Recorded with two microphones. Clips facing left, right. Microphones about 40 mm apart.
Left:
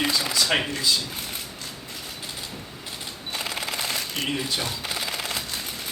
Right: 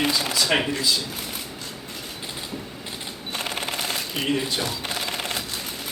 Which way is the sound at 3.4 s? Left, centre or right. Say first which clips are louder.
Right 1 dB; right.